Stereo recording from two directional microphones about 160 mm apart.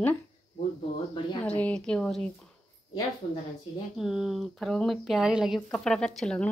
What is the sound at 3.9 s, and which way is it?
Speech, centre (ahead or behind).